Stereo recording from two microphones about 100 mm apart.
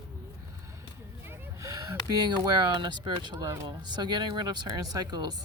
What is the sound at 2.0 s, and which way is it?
Speech, 45° right (ahead or behind).